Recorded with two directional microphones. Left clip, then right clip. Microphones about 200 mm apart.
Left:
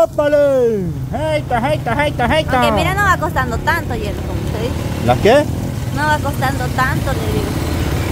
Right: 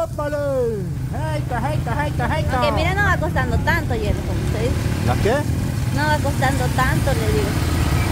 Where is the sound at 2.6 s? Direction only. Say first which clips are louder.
Left 5 dB; 20° left (ahead or behind).